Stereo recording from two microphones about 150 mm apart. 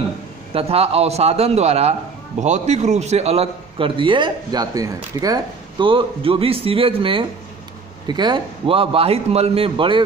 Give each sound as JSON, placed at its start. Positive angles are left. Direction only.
{"t": 0.5, "sound": "a man's voice", "side_deg": -40}